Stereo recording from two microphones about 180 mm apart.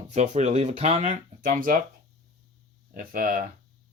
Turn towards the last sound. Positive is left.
turn(degrees=-50)  # may be behind; listen again after turning